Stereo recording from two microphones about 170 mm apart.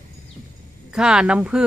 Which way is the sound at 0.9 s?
5° right (ahead or behind).